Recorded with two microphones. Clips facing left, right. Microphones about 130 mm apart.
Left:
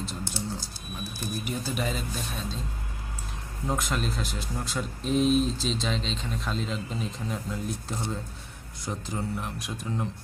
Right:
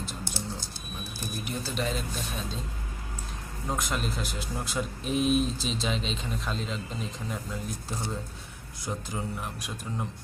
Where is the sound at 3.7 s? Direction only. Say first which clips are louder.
Left 2 dB; centre (ahead or behind).